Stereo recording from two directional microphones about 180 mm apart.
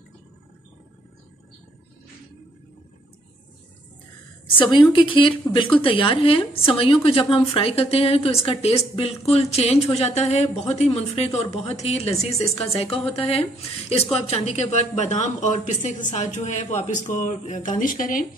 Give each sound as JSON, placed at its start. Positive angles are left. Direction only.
{"t": 4.6, "sound": "a woman's voice", "side_deg": 25}